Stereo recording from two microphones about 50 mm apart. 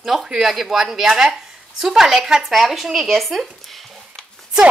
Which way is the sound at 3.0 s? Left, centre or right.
Centre.